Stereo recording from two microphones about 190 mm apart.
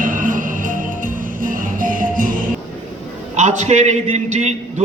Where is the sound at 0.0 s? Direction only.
45° right (ahead or behind).